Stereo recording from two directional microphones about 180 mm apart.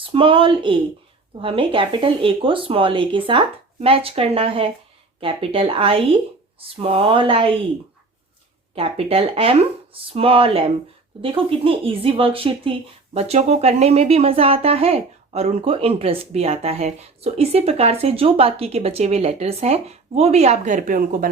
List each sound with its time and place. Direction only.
0.0 s speech: 30° right (ahead or behind)
8.7 s speech: 30° right (ahead or behind); by 21.2 s 50° right (ahead or behind)